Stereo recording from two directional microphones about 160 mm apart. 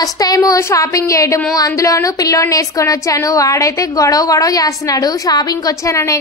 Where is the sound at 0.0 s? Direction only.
25° left (ahead or behind).